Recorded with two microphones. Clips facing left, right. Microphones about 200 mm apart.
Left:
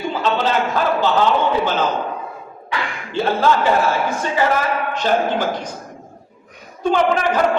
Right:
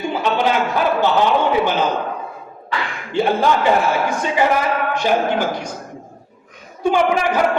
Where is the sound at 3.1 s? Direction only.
15° right (ahead or behind).